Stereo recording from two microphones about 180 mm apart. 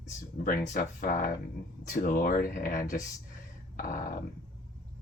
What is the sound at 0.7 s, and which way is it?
Speech, 45° left (ahead or behind).